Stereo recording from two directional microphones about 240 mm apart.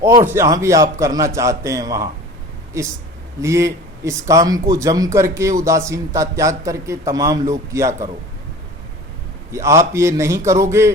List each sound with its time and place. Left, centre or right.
0.0 s speech: centre
9.5 s speech: centre